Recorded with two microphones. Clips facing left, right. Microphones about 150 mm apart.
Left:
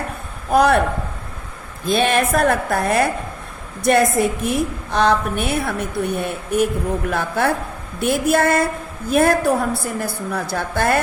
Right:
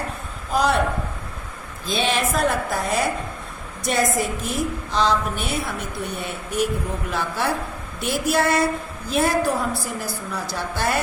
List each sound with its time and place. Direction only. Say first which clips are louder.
0.5 s a woman's voice: left 6 dB; 55° left (ahead or behind)
1.8 s a woman's voice: left 5 dB; 55° left (ahead or behind)